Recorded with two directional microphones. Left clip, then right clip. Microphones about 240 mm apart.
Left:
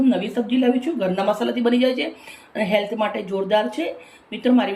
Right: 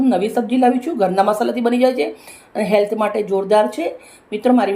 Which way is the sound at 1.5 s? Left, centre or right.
Centre.